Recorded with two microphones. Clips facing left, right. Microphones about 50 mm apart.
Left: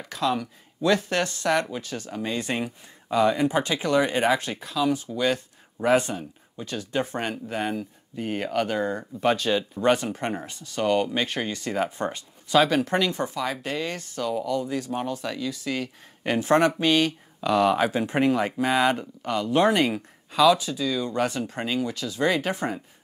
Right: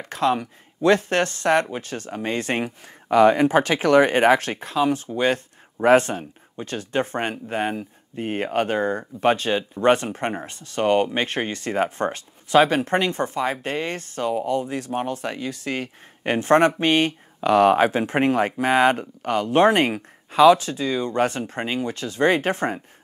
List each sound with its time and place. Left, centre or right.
0.0 s speech: right
9.8 s speech: right